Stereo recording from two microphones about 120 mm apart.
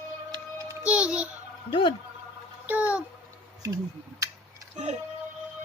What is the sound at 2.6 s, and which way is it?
Speech, 15° right (ahead or behind).